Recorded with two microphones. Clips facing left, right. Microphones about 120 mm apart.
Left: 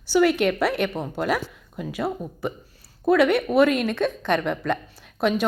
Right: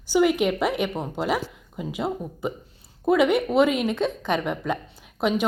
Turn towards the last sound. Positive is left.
turn(degrees=-15)  # may be behind; listen again after turning